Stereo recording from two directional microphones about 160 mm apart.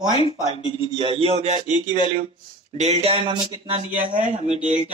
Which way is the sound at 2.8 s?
40° right (ahead or behind).